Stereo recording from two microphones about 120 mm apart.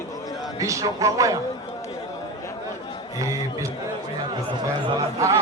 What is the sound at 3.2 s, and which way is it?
Speech, 25° right (ahead or behind).